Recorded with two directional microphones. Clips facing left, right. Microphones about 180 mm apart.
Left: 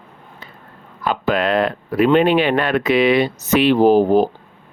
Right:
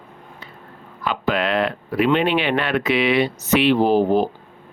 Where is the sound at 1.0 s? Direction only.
45° left (ahead or behind).